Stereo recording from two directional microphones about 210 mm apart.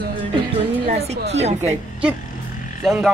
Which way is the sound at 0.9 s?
30° right (ahead or behind).